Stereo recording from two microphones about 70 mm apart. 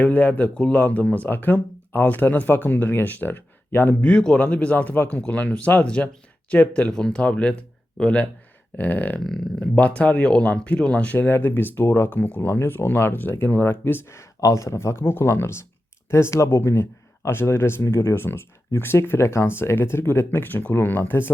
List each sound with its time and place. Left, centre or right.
0.0 s speech: left
4.0 s speech: centre
8.8 s speech: left
9.2 s speech: centre; by 21.3 s left